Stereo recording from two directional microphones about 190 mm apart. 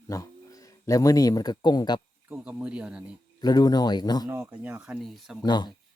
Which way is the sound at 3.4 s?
20° left (ahead or behind).